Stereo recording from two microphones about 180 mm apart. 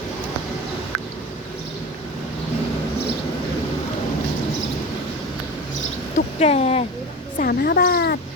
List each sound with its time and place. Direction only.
6.1 s speech: 35° left (ahead or behind)
7.3 s speech: 55° left (ahead or behind)